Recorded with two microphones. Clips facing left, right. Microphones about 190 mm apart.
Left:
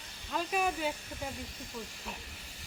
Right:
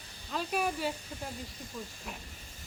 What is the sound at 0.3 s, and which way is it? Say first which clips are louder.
Speech: even; centre (ahead or behind).